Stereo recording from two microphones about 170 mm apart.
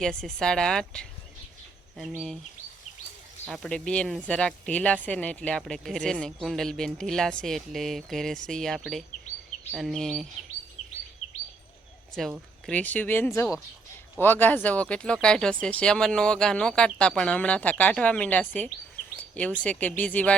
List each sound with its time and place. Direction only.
0.0 s speech: 5° left (ahead or behind)
3.5 s speech: 5° left (ahead or behind)
10.8 s bird vocalization: 40° left (ahead or behind)
12.6 s speech: 10° left (ahead or behind)